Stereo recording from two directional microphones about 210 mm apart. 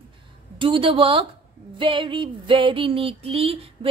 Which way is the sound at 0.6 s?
25° right (ahead or behind).